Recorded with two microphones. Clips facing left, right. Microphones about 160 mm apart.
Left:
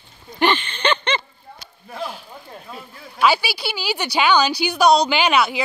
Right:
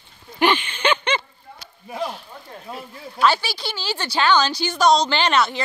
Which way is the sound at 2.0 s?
Centre (ahead or behind).